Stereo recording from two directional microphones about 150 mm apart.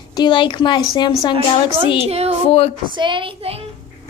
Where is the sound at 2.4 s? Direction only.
40° left (ahead or behind).